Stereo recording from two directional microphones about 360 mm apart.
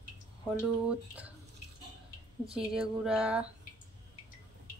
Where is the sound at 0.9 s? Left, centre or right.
Centre.